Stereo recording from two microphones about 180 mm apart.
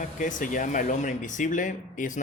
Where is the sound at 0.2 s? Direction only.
45° left (ahead or behind).